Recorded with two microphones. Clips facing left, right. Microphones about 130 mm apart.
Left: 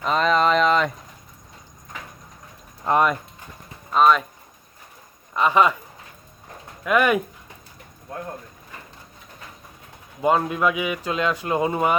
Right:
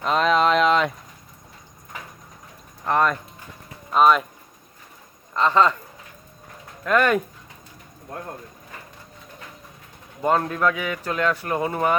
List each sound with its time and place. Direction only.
0.0 s a sound: centre (ahead or behind)
2.8 s speech: 15° left (ahead or behind)
3.9 s speech: centre (ahead or behind)
5.3 s speech: 10° left (ahead or behind)
6.8 s speech: 10° left (ahead or behind)
10.2 s speech: 10° left (ahead or behind)